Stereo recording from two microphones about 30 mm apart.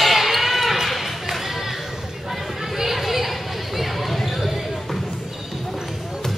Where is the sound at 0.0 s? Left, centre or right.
Centre.